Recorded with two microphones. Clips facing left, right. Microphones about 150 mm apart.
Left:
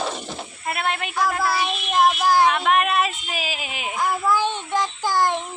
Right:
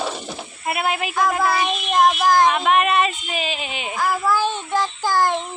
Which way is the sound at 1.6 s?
5° left (ahead or behind).